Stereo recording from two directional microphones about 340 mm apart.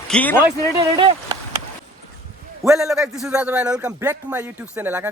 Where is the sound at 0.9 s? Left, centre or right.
Centre.